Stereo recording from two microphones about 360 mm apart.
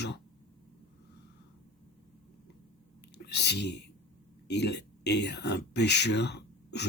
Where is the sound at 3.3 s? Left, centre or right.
Left.